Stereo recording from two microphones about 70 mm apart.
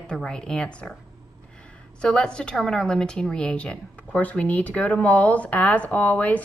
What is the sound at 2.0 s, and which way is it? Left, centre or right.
Speech, centre.